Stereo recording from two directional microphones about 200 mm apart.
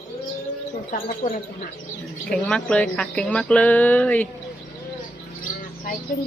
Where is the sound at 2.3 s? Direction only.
5° left (ahead or behind).